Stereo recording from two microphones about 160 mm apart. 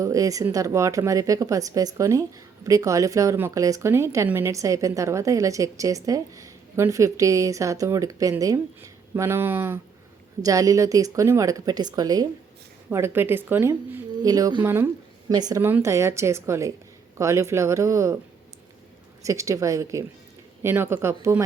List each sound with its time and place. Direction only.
0.0 s a woman's voice: 20° right (ahead or behind)
15.3 s a woman's voice: 25° right (ahead or behind)
19.2 s a woman's voice: 20° right (ahead or behind)